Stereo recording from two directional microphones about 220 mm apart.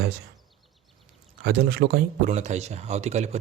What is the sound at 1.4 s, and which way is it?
Speech, 50° right (ahead or behind).